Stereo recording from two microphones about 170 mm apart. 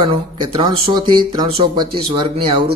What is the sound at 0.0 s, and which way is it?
Speech, 25° right (ahead or behind).